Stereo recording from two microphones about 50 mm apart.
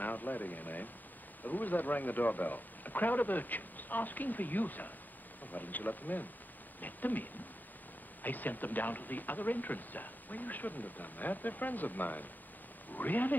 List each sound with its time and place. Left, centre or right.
0.0 s speech: left